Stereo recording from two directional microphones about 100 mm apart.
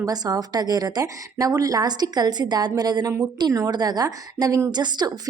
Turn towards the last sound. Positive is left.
turn(degrees=-45)  # may be behind; listen again after turning